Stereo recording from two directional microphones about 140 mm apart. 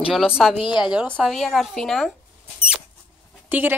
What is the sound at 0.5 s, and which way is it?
Speech, 35° left (ahead or behind).